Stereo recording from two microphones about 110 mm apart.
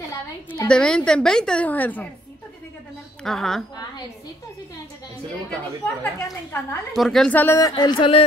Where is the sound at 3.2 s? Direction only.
5° left (ahead or behind).